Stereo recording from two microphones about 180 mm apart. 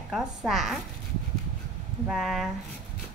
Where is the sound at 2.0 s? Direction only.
Centre (ahead or behind).